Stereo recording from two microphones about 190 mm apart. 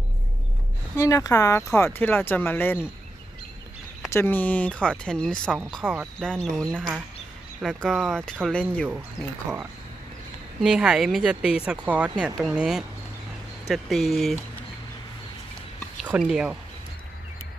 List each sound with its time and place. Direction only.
0.9 s speech: 15° left (ahead or behind)
4.1 s speech: 10° left (ahead or behind)
7.6 s speech: centre (ahead or behind)
10.6 s speech: 5° right (ahead or behind)
16.0 s speech: 5° right (ahead or behind)